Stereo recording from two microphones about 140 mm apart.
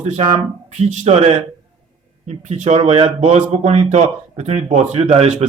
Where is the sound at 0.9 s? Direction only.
50° right (ahead or behind).